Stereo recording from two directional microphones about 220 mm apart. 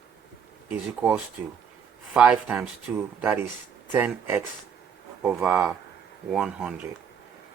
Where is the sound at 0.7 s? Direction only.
5° right (ahead or behind).